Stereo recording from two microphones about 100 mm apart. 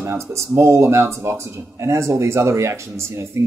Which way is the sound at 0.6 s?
30° right (ahead or behind).